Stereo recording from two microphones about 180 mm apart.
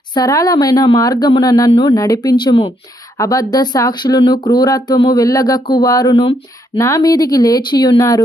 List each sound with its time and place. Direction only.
0.1 s speech: 20° left (ahead or behind)